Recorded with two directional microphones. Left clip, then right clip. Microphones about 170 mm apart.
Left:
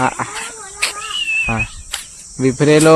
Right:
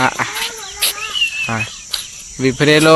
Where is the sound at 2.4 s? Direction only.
30° left (ahead or behind).